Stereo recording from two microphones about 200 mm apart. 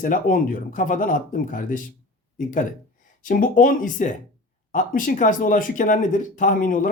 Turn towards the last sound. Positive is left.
turn(degrees=40)  # may be behind; listen again after turning